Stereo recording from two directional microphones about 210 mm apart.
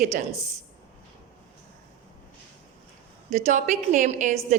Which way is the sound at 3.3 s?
35° right (ahead or behind).